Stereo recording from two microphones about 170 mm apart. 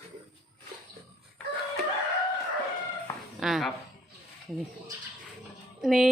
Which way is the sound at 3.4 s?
Centre (ahead or behind).